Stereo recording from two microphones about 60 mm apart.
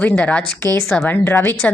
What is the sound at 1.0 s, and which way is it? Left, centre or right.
Speech, left.